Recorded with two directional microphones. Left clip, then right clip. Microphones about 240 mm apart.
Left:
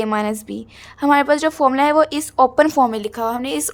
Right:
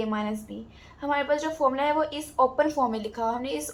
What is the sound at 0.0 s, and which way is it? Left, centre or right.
A woman's voice, left.